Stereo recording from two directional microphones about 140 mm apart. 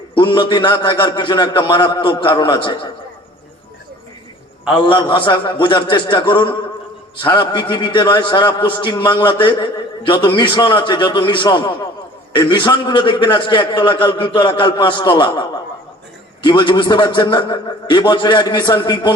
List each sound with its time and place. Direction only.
0.1 s a man's voice: 35° left (ahead or behind)
4.7 s a man's voice: 35° left (ahead or behind)